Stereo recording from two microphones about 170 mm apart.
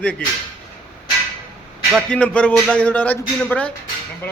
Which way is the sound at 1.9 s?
5° left (ahead or behind).